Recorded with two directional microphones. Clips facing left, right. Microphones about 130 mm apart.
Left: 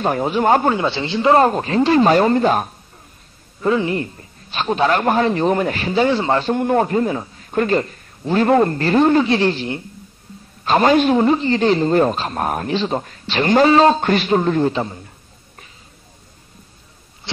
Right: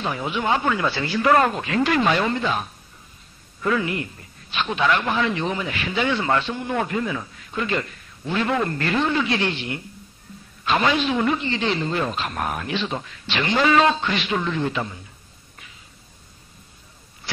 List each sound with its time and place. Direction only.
0.0 s speech: 40° left (ahead or behind)
0.7 s speech: 25° left (ahead or behind); by 2.7 s 45° left (ahead or behind)
3.6 s speech: 30° left (ahead or behind)
6.5 s speech: 45° left (ahead or behind)